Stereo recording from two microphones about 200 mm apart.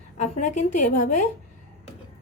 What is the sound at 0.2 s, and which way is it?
Speech, 35° left (ahead or behind).